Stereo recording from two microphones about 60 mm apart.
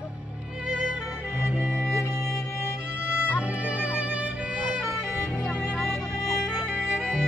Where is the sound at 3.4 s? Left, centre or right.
Right.